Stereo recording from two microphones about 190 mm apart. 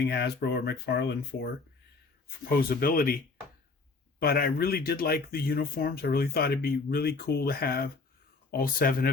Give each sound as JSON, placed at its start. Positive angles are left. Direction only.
{"t": 0.0, "sound": "speech", "side_deg": 60}
{"t": 2.5, "sound": "speech", "side_deg": 50}
{"t": 4.2, "sound": "speech", "side_deg": 55}